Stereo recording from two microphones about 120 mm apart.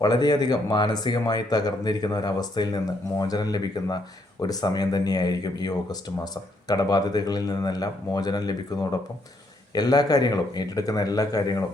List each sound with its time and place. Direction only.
0.0 s speech: 35° left (ahead or behind)